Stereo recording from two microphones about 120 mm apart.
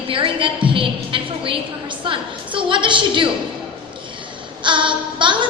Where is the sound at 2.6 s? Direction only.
45° right (ahead or behind).